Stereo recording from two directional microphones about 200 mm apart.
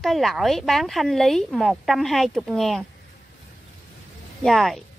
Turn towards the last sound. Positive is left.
turn(degrees=0)  # may be behind; listen again after turning